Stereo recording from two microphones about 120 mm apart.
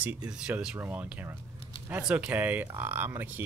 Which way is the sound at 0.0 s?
10° right (ahead or behind).